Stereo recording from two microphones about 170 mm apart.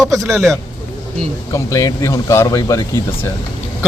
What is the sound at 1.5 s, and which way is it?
Speech, 20° left (ahead or behind).